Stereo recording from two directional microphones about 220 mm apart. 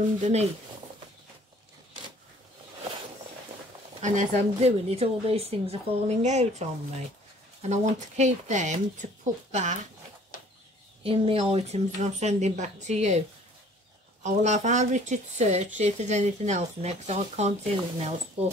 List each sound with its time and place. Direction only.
0.2 s a woman's voice: 30° right (ahead or behind)
4.0 s a woman's voice: 35° right (ahead or behind)
11.1 s speech: 25° right (ahead or behind)
14.2 s a woman's voice: 30° right (ahead or behind)